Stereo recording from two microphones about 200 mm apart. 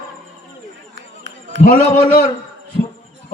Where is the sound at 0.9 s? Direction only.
65° right (ahead or behind).